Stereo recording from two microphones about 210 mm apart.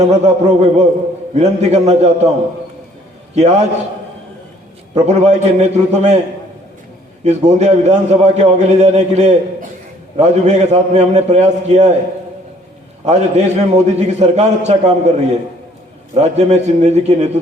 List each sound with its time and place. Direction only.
0.0 s a man's voice: 35° right (ahead or behind)
3.3 s a man's voice: 35° right (ahead or behind)
4.9 s a man's voice: 35° right (ahead or behind)
7.3 s a man's voice: 35° right (ahead or behind)
13.1 s a man's voice: 30° right (ahead or behind)
16.1 s a man's voice: 30° right (ahead or behind)